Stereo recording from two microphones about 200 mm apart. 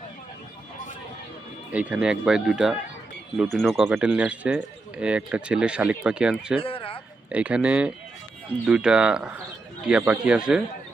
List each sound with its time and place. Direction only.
1.7 s speech: 5° right (ahead or behind)
6.6 s a sound: 30° left (ahead or behind)
7.3 s speech: 5° right (ahead or behind)